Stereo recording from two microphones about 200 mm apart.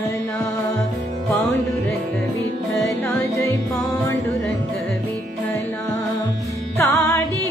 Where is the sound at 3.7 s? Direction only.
15° left (ahead or behind).